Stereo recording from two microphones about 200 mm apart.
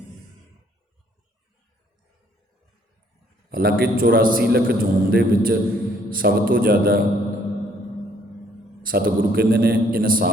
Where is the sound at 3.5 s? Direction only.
50° right (ahead or behind).